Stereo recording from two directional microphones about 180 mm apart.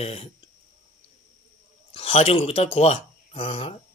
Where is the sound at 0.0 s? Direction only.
35° left (ahead or behind).